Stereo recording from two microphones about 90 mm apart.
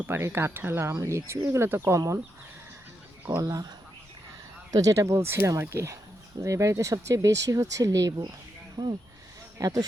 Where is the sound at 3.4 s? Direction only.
40° right (ahead or behind).